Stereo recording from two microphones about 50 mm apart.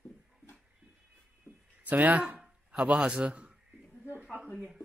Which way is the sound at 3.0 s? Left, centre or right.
Right.